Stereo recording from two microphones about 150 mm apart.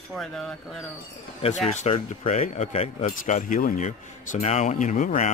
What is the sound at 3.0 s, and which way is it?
Speech, 60° left (ahead or behind).